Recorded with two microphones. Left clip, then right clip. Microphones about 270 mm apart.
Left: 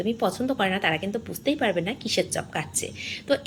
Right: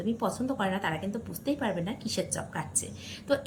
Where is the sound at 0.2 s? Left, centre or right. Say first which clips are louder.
Left 6 dB; centre.